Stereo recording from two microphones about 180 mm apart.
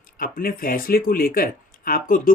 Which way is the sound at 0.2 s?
55° left (ahead or behind).